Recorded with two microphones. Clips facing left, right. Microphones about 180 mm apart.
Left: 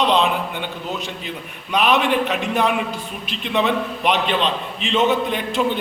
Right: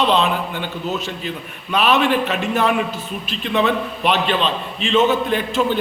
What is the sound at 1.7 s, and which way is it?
A man's voice, 15° left (ahead or behind).